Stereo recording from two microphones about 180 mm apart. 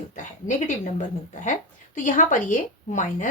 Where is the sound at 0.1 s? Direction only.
45° left (ahead or behind).